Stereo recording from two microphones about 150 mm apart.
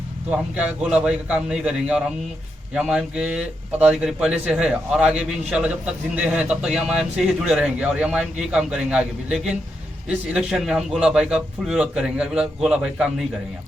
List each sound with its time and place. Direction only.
0.3 s a man's voice: 10° right (ahead or behind)